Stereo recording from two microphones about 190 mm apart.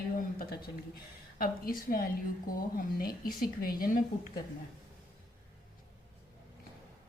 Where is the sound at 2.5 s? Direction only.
50° left (ahead or behind).